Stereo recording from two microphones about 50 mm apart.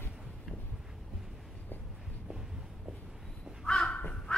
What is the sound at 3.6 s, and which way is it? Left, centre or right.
Crow, centre.